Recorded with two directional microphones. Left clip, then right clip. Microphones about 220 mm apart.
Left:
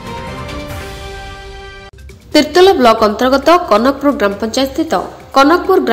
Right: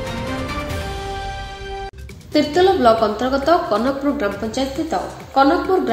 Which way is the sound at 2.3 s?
40° left (ahead or behind).